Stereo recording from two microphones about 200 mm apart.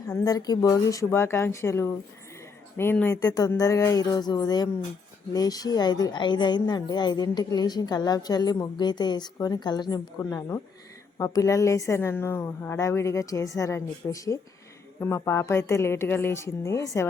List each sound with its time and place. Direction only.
0.1 s a woman's voice: 20° left (ahead or behind)